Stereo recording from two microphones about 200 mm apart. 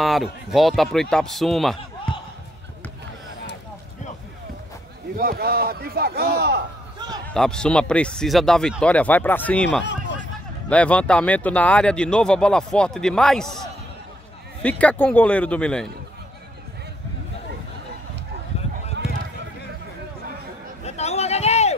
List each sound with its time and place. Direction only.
0.0 s speech: centre (ahead or behind)
5.1 s a man's voice: 45° right (ahead or behind)
7.2 s speech: 5° left (ahead or behind)
14.6 s a man's voice: 5° left (ahead or behind)
20.8 s a sound: 35° left (ahead or behind)